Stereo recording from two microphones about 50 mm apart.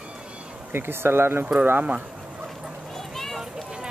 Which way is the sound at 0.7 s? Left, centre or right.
Right.